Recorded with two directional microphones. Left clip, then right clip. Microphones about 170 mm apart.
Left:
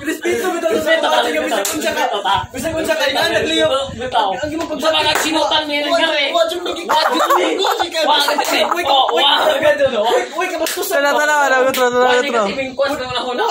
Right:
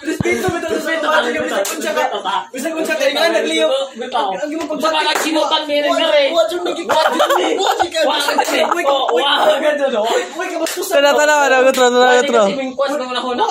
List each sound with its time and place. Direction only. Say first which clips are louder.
6.9 s a man's voice: even; 35° right (ahead or behind)
10.9 s a man's voice: right 3 dB; 40° right (ahead or behind)